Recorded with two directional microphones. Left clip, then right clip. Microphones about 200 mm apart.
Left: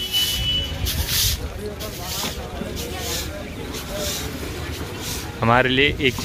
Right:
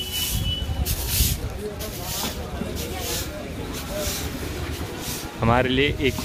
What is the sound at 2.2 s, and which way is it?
Vehicle, 35° right (ahead or behind).